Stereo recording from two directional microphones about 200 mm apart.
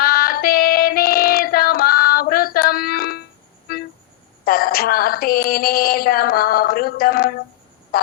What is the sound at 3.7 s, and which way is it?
Music, 50° left (ahead or behind).